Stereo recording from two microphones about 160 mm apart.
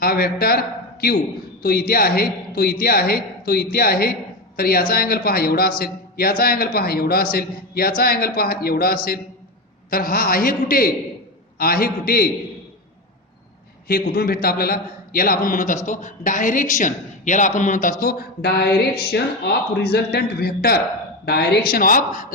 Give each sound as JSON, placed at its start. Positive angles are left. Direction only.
{"t": 0.0, "sound": "a man's voice", "side_deg": 70}
{"t": 1.9, "sound": "a man's voice", "side_deg": 70}
{"t": 13.8, "sound": "a man's voice", "side_deg": 70}
{"t": 18.0, "sound": "speech", "side_deg": 70}
{"t": 21.2, "sound": "a man's voice", "side_deg": 85}